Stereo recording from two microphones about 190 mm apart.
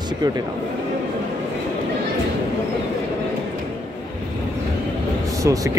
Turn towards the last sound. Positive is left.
turn(degrees=-15)  # may be behind; listen again after turning